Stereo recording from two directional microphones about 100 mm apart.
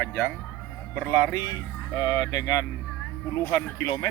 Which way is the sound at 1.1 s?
35° left (ahead or behind).